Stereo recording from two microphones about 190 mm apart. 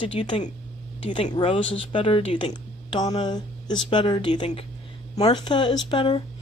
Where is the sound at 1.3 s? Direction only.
30° left (ahead or behind).